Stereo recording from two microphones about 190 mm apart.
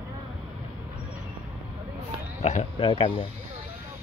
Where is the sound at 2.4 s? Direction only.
35° left (ahead or behind).